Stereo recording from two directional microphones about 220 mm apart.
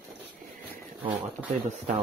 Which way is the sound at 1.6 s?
30° right (ahead or behind).